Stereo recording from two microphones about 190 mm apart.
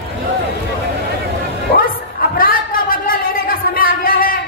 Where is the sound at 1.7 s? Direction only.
50° left (ahead or behind).